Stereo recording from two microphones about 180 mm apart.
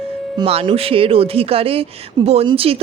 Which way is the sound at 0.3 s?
35° right (ahead or behind).